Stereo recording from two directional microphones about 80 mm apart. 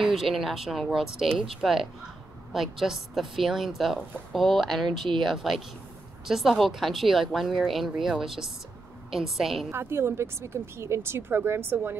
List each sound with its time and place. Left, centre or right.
0.0 s speech: centre
9.7 s speech: right